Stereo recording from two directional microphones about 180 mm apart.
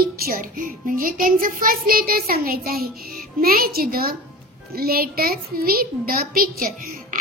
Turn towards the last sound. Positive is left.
turn(degrees=-50)  # may be behind; listen again after turning